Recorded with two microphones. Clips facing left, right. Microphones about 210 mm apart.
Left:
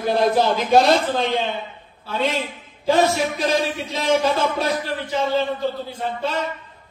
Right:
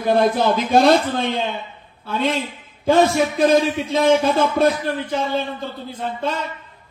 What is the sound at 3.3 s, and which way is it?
Speech, 55° right (ahead or behind).